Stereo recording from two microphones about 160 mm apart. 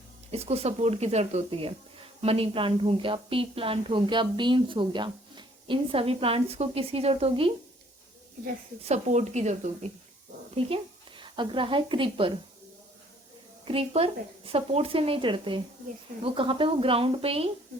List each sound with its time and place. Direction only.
0.3 s speech: 40° right (ahead or behind)
8.8 s speech: 45° right (ahead or behind)
11.2 s speech: 30° right (ahead or behind)
13.7 s speech: 35° right (ahead or behind)